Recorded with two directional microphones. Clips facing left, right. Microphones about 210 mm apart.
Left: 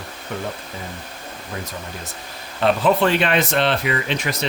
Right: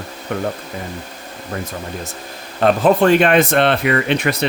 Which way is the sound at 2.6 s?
45° right (ahead or behind).